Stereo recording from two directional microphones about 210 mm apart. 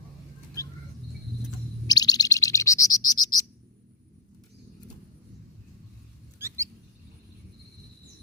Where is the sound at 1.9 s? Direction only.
20° left (ahead or behind).